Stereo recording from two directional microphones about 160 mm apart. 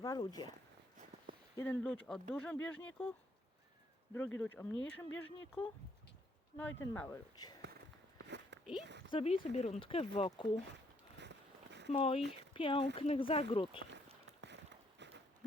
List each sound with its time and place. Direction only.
0.0 s speech: 25° left (ahead or behind)
1.5 s speech: 10° left (ahead or behind)
4.1 s speech: 15° left (ahead or behind)
8.2 s a sound: 90° right
8.8 s speech: 90° right
9.0 s speech: 35° left (ahead or behind)
11.2 s a sound: 90° right
11.9 s speech: 40° left (ahead or behind)
12.2 s speech: 90° right
12.5 s speech: 35° left (ahead or behind)
14.4 s a sound: 90° right